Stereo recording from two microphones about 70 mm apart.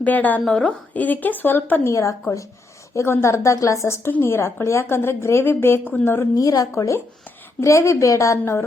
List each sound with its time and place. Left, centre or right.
0.0 s a woman's voice: left
0.4 s a woman's voice: centre
0.9 s a woman's voice: left
1.9 s a woman's voice: left
6.3 s a woman's voice: left